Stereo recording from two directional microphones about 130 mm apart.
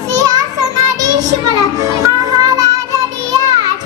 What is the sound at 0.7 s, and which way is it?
Child singing, 30° right (ahead or behind).